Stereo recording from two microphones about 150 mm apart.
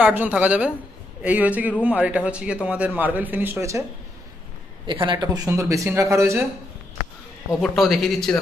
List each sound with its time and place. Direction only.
0.0 s a man's voice: 10° right (ahead or behind)
4.8 s speech: 35° right (ahead or behind)
7.6 s a man's voice: centre (ahead or behind)